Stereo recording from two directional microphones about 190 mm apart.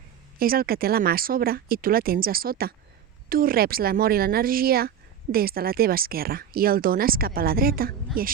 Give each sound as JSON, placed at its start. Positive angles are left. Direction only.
{"t": 0.3, "sound": "speech", "side_deg": -50}